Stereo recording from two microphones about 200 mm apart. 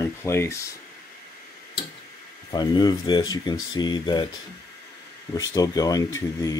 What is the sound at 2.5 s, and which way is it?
Speech, 20° left (ahead or behind).